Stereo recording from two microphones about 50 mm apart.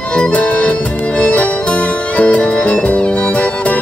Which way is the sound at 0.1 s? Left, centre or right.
Left.